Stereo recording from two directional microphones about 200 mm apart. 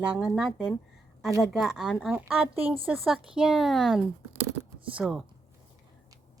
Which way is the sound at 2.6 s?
30° right (ahead or behind).